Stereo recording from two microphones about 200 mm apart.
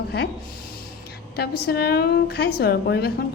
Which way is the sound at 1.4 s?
55° left (ahead or behind).